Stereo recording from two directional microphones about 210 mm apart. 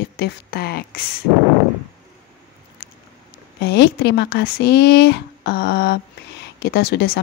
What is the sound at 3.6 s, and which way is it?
Speech, 55° left (ahead or behind).